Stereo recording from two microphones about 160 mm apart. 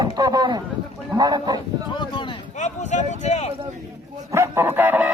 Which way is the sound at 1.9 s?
30° left (ahead or behind).